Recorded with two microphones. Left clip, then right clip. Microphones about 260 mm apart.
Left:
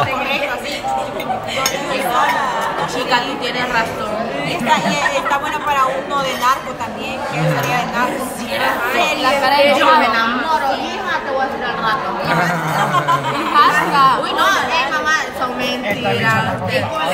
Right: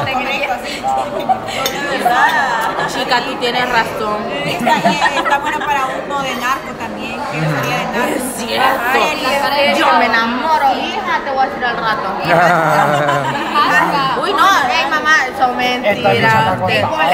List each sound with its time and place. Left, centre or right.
4.6 s speech: centre
9.7 s a woman's voice: centre
11.8 s speech: centre
13.6 s chatter: left
14.4 s speech: centre